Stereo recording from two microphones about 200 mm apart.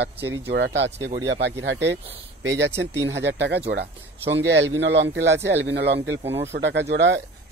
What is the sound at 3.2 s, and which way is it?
Speech, 60° right (ahead or behind).